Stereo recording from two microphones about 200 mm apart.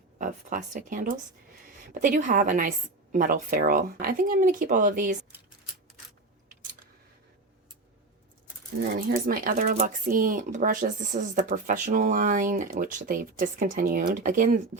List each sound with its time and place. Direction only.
0.2 s speech: 40° right (ahead or behind)
8.8 s speech: 45° right (ahead or behind)